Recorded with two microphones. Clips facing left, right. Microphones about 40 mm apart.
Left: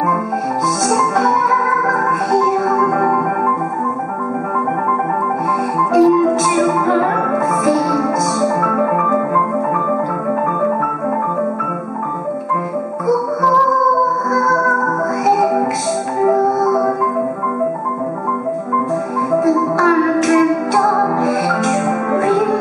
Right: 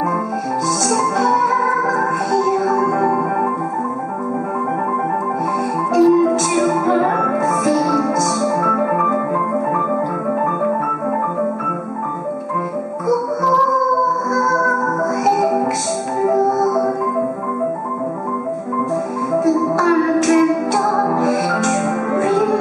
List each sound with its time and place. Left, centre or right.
0.7 s music: centre
5.5 s music: centre
13.1 s music: centre
19.3 s music: centre